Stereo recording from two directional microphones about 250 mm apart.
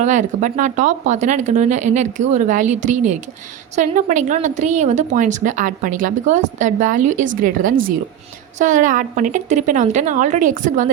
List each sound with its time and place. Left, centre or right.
0.0 s a woman's voice: right